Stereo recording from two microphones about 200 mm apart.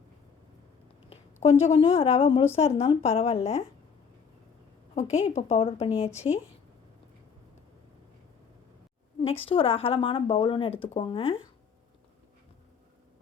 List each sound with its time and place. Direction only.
1.1 s a sound: 30° left (ahead or behind)
1.7 s a woman's voice: 30° left (ahead or behind)
4.9 s a woman's voice: 35° left (ahead or behind)
9.2 s speech: 30° left (ahead or behind)